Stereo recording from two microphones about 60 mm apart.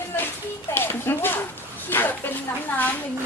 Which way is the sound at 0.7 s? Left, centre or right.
Left.